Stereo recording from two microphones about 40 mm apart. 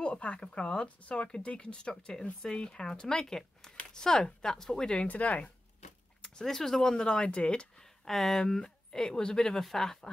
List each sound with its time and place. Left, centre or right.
0.0 s a sound: left
0.4 s speech: left
5.0 s speech: left
6.4 s speech: centre; by 7.6 s left
8.0 s a woman's voice: centre
9.6 s speech: centre